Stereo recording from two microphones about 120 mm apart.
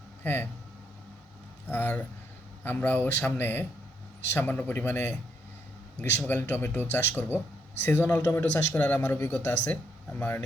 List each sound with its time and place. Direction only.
0.2 s speech: 15° left (ahead or behind)
1.7 s speech: 15° left (ahead or behind)